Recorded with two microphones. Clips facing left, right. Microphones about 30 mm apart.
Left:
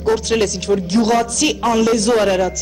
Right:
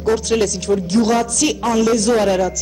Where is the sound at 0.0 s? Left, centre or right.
Left.